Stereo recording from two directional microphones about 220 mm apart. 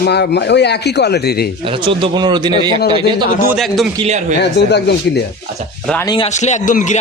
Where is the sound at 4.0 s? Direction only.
30° right (ahead or behind).